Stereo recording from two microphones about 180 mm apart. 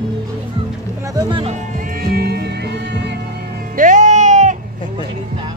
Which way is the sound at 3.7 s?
45° right (ahead or behind).